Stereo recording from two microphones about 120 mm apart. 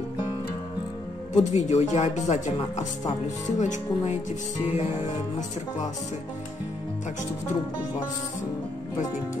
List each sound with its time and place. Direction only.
1.3 s speech: 65° left (ahead or behind)
2.2 s speech: 90° left